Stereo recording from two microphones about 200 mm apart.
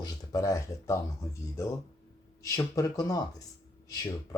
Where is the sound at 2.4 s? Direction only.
15° left (ahead or behind).